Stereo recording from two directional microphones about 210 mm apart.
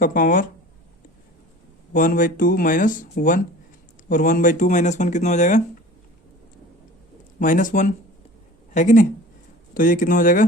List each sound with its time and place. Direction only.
0.0 s speech: 40° left (ahead or behind)
1.9 s speech: 40° left (ahead or behind)
7.3 s speech: 40° left (ahead or behind)